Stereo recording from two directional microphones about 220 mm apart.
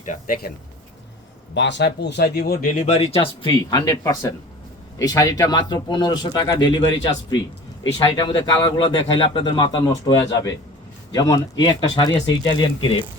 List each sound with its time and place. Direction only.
0.0 s speech: 35° left (ahead or behind)
1.5 s speech: 55° left (ahead or behind); by 13.1 s 20° left (ahead or behind)